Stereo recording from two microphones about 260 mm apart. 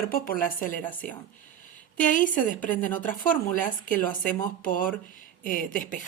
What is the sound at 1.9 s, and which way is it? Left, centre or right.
Speech, left.